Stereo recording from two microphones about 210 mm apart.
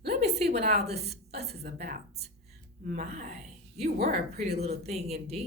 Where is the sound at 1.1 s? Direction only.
30° right (ahead or behind).